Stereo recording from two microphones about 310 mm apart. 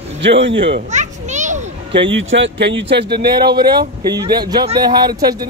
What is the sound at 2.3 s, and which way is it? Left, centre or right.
Speech, right.